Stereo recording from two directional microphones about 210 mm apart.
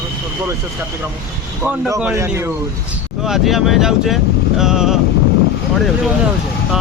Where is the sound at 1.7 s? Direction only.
10° right (ahead or behind).